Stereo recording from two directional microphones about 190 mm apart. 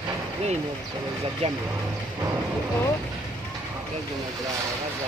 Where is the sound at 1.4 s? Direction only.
30° right (ahead or behind).